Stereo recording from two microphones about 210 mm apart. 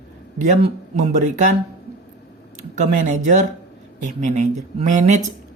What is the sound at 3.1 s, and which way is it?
Speech, 35° right (ahead or behind).